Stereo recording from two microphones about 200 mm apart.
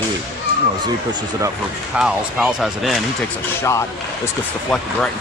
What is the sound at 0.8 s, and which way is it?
Speech, 20° right (ahead or behind).